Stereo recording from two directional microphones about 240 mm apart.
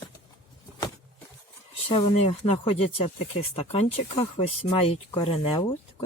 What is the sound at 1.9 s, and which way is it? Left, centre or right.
Speech, left.